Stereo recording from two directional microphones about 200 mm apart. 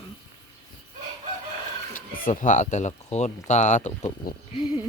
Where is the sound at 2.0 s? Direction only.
40° left (ahead or behind).